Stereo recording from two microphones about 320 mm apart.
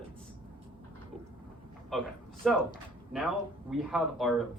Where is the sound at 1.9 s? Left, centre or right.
Centre.